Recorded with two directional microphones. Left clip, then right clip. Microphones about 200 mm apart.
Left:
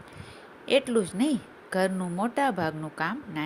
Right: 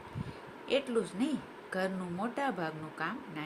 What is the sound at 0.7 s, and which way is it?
Speech, 40° left (ahead or behind).